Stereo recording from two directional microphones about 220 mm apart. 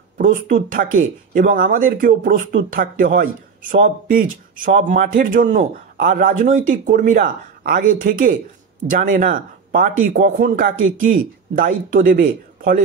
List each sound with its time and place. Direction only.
0.2 s speech: 40° right (ahead or behind)